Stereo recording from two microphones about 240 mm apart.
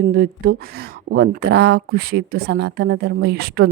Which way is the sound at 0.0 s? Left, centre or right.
Right.